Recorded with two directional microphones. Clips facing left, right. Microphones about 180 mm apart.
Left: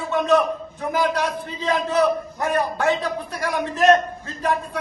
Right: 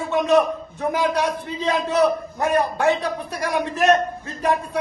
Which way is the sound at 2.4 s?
15° right (ahead or behind).